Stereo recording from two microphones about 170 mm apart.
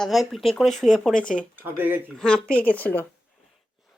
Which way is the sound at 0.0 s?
Centre (ahead or behind).